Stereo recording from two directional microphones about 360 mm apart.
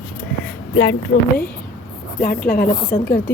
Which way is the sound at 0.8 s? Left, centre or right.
Left.